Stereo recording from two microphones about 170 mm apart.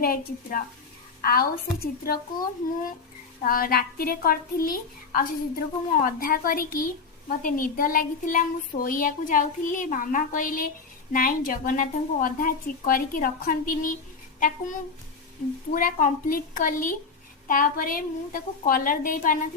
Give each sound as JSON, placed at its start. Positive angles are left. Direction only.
{"t": 0.0, "sound": "a woman's voice", "side_deg": 60}
{"t": 3.4, "sound": "a woman's voice", "side_deg": 60}